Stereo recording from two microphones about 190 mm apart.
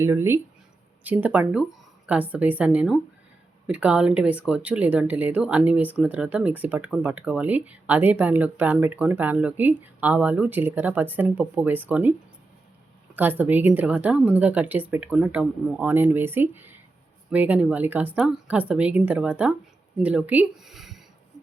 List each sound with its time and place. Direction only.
0.0 s speech: 15° right (ahead or behind)
13.1 s speech: 10° right (ahead or behind)